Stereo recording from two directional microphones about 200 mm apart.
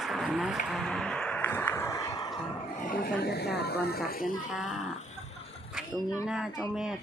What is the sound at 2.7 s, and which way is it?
Speech, 45° left (ahead or behind).